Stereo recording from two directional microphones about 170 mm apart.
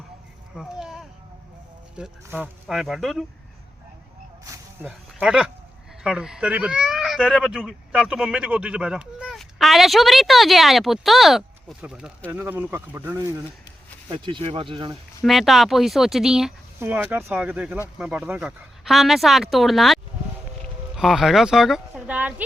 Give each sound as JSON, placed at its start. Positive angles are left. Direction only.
{"t": 0.5, "sound": "a sound", "side_deg": -5}
{"t": 2.0, "sound": "speech", "side_deg": -5}
{"t": 4.4, "sound": "snake", "side_deg": -20}
{"t": 4.9, "sound": "speech", "side_deg": -5}
{"t": 14.1, "sound": "speech", "side_deg": -30}
{"t": 15.2, "sound": "speech", "side_deg": 0}